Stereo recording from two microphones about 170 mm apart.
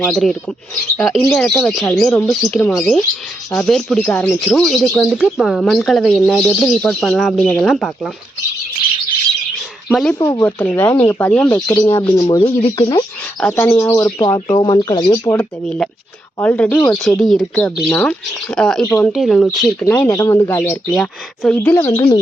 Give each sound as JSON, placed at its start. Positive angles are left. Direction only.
{"t": 0.0, "sound": "speech", "side_deg": 5}
{"t": 9.9, "sound": "speech", "side_deg": 0}
{"t": 10.2, "sound": "speech", "side_deg": 20}
{"t": 13.4, "sound": "speech", "side_deg": 10}
{"t": 15.6, "sound": "speech", "side_deg": 5}
{"t": 19.8, "sound": "speech", "side_deg": 15}
{"t": 20.9, "sound": "speech", "side_deg": 0}
{"t": 21.7, "sound": "speech", "side_deg": 15}